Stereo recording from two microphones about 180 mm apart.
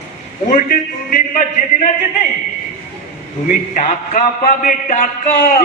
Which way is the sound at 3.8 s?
45° left (ahead or behind).